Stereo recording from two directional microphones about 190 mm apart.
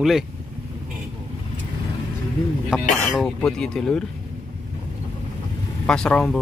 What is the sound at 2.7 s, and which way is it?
Speech, 5° right (ahead or behind).